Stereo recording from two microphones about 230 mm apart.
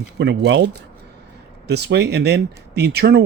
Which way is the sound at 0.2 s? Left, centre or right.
Right.